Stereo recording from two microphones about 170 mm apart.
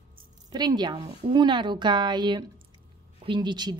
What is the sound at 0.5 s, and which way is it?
A woman's voice, 25° right (ahead or behind).